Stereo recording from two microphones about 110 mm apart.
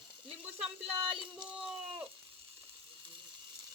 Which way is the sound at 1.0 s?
50° right (ahead or behind).